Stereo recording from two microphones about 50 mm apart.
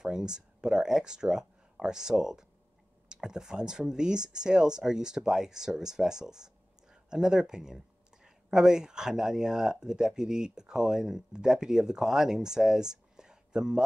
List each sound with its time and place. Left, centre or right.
0.0 s speech: centre